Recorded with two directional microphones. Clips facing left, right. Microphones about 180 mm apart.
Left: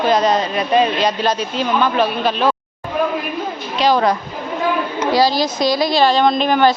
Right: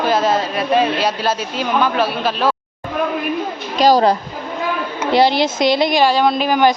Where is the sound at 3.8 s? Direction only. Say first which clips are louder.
Right 3 dB; 40° right (ahead or behind).